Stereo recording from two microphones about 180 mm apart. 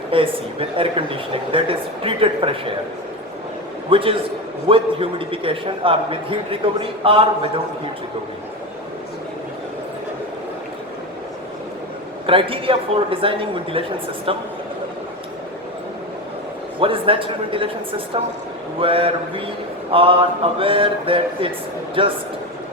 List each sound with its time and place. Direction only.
0.1 s a man's voice: 30° right (ahead or behind)
3.8 s a man's voice: 30° right (ahead or behind)
12.2 s a man's voice: 30° right (ahead or behind)
16.8 s a man's voice: 30° right (ahead or behind)